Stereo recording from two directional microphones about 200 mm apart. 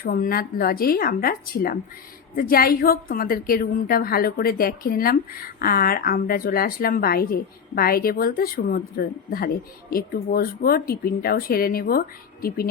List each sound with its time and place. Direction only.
0.0 s a woman's voice: 45° left (ahead or behind)